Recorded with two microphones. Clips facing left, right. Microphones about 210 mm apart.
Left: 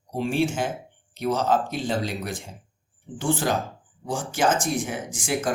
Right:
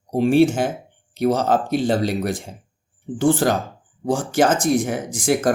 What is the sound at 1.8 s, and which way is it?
Speech, 35° right (ahead or behind).